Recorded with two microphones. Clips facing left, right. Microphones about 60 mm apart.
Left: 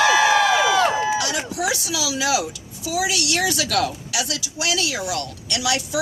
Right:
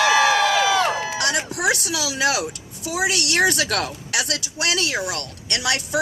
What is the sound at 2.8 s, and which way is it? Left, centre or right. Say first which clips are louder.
A woman's voice: even; right.